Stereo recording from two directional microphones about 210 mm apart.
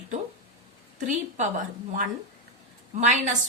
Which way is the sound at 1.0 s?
35° right (ahead or behind).